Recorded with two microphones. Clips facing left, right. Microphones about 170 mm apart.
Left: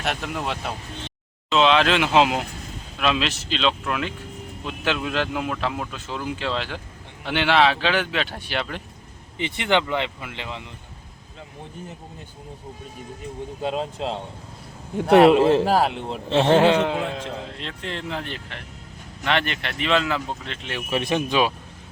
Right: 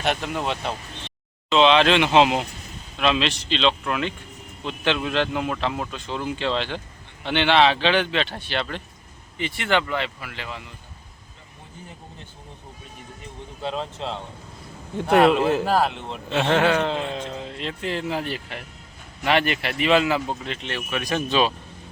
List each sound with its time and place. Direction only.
0.0 s a man's voice: centre (ahead or behind); by 10.6 s 20° left (ahead or behind)
15.2 s a man's voice: 30° left (ahead or behind)
16.7 s a man's voice: 10° left (ahead or behind)
20.9 s speech: 25° left (ahead or behind)